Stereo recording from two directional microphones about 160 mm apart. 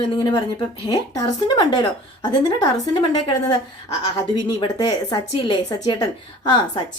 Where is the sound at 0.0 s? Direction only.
30° left (ahead or behind).